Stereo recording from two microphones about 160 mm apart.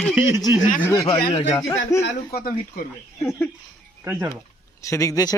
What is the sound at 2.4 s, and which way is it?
Speech, 65° left (ahead or behind).